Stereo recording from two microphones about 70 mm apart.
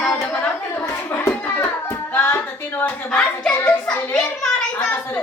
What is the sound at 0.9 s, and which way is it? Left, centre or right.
Hands, left.